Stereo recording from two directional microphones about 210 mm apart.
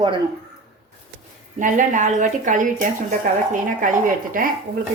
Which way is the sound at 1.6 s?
40° right (ahead or behind).